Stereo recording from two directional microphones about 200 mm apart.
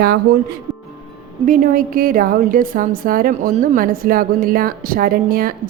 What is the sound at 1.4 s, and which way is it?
A woman's voice, 40° right (ahead or behind).